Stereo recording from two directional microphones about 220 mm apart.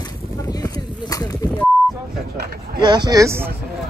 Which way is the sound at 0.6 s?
15° left (ahead or behind).